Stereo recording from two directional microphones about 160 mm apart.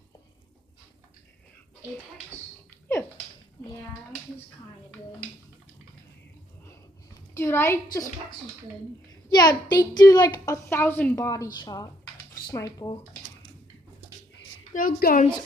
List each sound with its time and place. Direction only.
7.3 s a woman's voice: 15° left (ahead or behind)
9.3 s a child's voice: 25° left (ahead or behind)
10.7 s a woman's voice: 10° left (ahead or behind)
14.7 s a woman's voice: 60° left (ahead or behind)